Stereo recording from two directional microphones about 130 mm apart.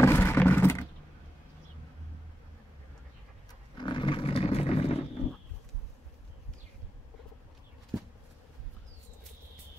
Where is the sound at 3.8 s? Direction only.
40° left (ahead or behind).